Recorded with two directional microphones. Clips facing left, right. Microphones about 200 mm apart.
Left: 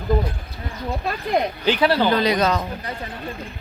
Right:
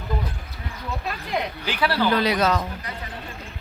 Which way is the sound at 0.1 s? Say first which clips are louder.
Left 8 dB; 35° left (ahead or behind).